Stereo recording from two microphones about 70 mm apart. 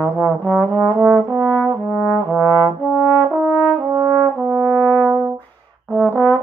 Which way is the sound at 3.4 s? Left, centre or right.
Centre.